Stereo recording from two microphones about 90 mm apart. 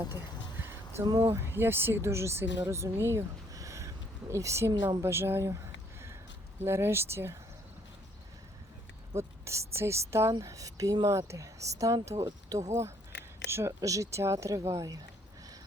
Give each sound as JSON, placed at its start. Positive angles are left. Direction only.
{"t": 0.6, "sound": "music", "side_deg": -30}
{"t": 1.0, "sound": "speech", "side_deg": -55}
{"t": 1.3, "sound": "speech", "side_deg": -25}
{"t": 6.6, "sound": "speech", "side_deg": -30}
{"t": 9.1, "sound": "speech", "side_deg": -30}